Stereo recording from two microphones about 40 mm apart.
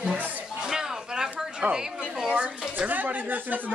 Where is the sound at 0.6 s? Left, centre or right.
Centre.